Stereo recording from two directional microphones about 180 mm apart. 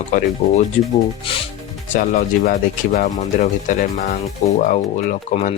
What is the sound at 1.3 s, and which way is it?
Speech, 30° left (ahead or behind).